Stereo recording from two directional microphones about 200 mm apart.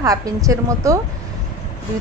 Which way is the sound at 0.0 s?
15° right (ahead or behind).